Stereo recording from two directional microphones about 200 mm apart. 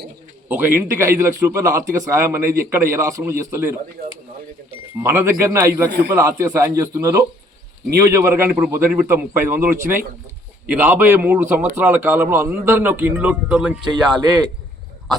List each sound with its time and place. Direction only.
0.0 s a man's voice: 10° right (ahead or behind)
4.9 s a man's voice: 10° right (ahead or behind)
13.8 s speech: 25° right (ahead or behind)